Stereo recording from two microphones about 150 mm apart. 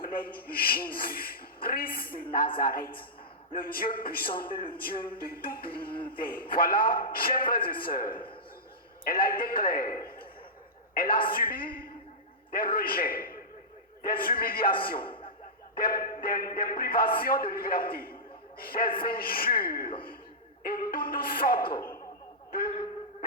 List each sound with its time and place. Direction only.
0.0 s a sound: 75° left (ahead or behind)
0.3 s a man's voice: 85° left
14.9 s chuckle: 35° left (ahead or behind)
15.7 s speech: 75° left (ahead or behind)
18.6 s a man's voice: 80° left